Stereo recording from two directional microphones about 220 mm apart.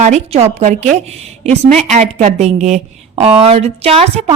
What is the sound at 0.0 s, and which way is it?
A woman's voice, 30° right (ahead or behind).